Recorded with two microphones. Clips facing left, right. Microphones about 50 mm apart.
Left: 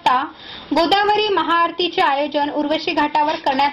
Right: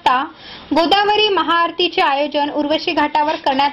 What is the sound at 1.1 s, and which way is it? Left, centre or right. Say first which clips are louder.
Speech: right 2 dB; right.